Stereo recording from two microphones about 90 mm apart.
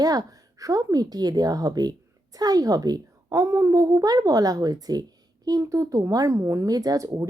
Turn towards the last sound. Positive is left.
turn(degrees=-45)  # may be behind; listen again after turning